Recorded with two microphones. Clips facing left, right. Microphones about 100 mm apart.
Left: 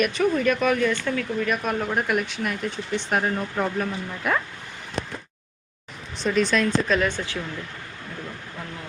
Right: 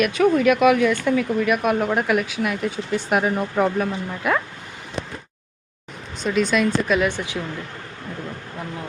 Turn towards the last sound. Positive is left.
turn(degrees=-15)  # may be behind; listen again after turning